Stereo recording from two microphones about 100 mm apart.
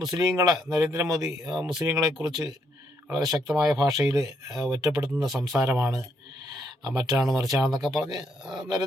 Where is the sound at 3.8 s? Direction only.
35° right (ahead or behind).